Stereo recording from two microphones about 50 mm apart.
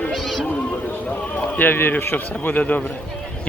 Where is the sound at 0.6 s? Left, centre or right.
Left.